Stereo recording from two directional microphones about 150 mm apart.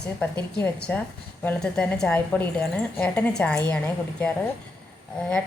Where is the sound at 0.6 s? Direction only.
10° left (ahead or behind).